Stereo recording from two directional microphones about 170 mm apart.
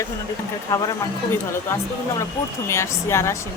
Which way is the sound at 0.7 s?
15° left (ahead or behind).